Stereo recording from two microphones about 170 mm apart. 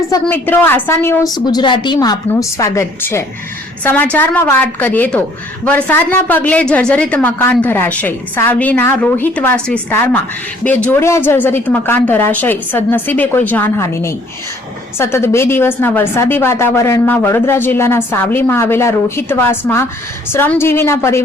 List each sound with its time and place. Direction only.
0.1 s a woman's voice: 10° left (ahead or behind)